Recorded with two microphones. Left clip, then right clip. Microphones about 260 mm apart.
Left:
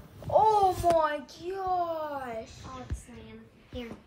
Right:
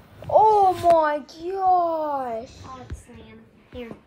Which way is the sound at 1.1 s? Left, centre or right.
Right.